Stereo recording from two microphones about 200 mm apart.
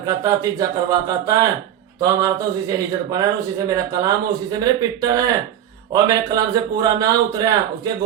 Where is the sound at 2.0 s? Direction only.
20° right (ahead or behind).